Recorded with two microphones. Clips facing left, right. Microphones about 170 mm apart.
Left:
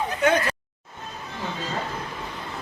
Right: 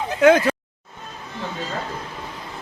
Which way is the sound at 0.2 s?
90° right.